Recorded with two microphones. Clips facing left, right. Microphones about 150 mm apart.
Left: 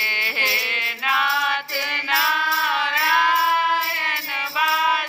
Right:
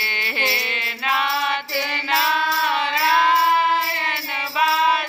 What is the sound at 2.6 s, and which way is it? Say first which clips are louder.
Music: right 2 dB; centre (ahead or behind).